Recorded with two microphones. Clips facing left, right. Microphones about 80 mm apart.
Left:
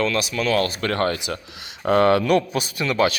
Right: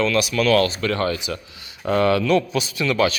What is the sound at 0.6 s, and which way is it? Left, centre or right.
Speech, left.